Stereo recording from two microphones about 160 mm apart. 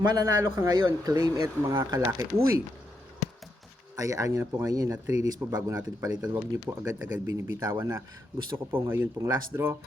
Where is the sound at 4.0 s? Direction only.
20° right (ahead or behind).